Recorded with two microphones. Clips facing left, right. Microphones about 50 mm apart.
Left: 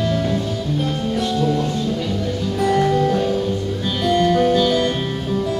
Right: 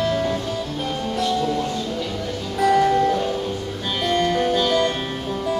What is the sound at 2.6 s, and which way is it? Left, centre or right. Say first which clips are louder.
Music: right 1 dB; centre.